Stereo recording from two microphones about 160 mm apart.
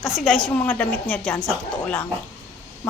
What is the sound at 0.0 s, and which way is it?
A woman's voice, centre (ahead or behind).